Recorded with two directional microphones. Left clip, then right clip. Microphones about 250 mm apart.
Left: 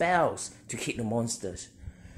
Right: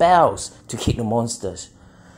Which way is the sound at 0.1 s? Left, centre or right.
Right.